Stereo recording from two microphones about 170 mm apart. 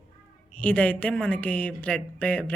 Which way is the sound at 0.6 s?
10° left (ahead or behind).